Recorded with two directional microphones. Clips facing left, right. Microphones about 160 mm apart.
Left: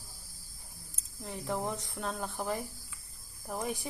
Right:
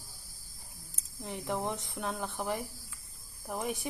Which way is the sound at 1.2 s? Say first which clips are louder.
Even; 20° right (ahead or behind).